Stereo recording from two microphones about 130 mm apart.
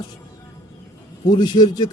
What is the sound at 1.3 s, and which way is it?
Speech, 35° left (ahead or behind).